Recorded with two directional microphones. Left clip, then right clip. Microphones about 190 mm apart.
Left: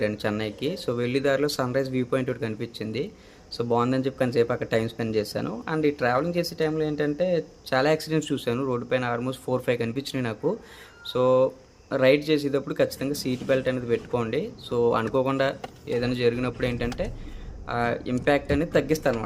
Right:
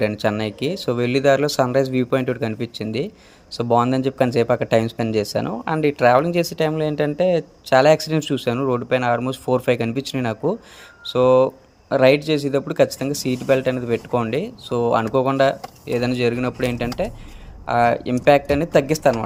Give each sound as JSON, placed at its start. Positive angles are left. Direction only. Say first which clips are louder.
{"t": 0.0, "sound": "speech", "louder": "right 6 dB", "side_deg": -35}